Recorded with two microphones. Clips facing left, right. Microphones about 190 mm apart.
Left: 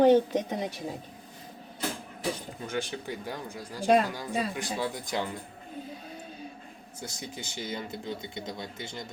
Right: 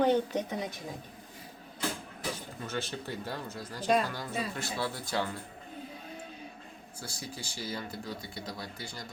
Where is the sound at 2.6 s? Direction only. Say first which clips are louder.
Left 3 dB; 15° left (ahead or behind).